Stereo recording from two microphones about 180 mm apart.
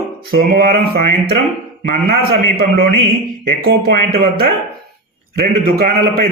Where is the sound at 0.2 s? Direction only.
60° right (ahead or behind).